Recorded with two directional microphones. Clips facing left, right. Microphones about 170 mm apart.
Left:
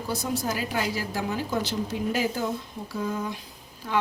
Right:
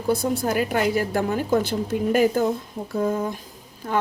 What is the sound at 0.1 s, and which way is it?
A woman's voice, 55° right (ahead or behind).